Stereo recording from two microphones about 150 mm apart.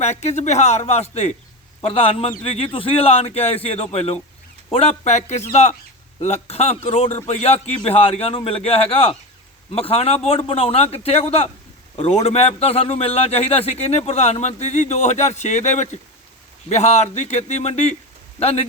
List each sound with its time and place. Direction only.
0.0 s a man's voice: 45° left (ahead or behind)